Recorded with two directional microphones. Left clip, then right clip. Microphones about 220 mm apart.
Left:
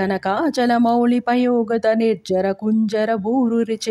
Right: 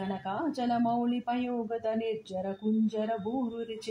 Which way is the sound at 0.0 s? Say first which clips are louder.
Left 14 dB; 45° left (ahead or behind).